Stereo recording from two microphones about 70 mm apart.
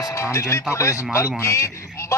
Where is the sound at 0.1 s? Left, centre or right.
Left.